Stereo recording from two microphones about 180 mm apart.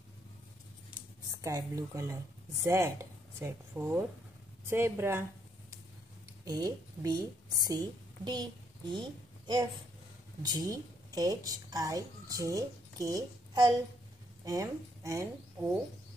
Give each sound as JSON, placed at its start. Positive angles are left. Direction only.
{"t": 1.4, "sound": "speech", "side_deg": -15}
{"t": 6.4, "sound": "a woman's voice", "side_deg": -20}